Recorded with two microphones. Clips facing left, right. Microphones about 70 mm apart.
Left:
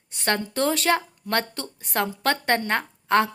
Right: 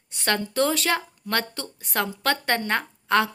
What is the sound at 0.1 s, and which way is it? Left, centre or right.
A woman's voice, left.